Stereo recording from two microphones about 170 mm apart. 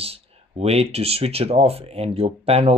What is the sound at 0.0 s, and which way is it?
Speech, 35° right (ahead or behind).